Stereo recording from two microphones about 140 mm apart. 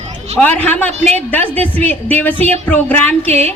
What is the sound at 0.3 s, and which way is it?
A woman's voice, 10° left (ahead or behind).